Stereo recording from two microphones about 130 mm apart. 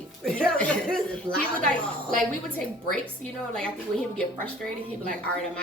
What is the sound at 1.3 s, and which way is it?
Speech, 40° right (ahead or behind).